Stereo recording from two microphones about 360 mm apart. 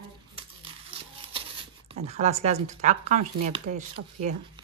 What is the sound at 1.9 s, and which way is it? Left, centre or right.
Speech, centre.